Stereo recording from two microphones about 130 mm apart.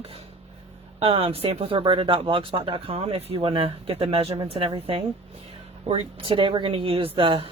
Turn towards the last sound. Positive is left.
turn(degrees=-40)  # may be behind; listen again after turning